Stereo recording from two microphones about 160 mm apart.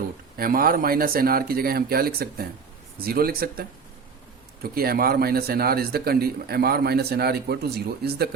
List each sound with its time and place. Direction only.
0.3 s a man's voice: 65° right (ahead or behind); by 8.3 s 80° right